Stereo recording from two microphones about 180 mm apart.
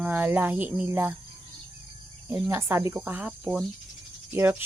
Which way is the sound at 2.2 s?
15° right (ahead or behind).